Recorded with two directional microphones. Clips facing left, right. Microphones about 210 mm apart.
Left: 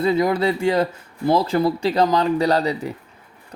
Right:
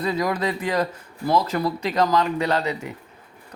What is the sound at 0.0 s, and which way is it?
Speech, 25° left (ahead or behind).